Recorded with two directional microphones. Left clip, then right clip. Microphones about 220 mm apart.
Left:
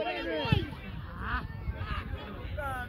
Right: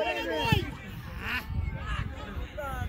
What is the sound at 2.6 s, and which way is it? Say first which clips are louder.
Speech: left 1 dB; 10° left (ahead or behind).